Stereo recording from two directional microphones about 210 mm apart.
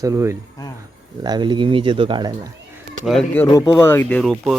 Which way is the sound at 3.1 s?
5° left (ahead or behind).